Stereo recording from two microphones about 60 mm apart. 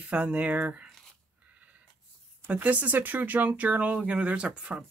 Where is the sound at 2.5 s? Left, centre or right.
Right.